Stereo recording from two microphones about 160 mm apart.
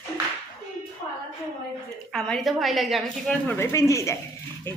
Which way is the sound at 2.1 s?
Centre (ahead or behind).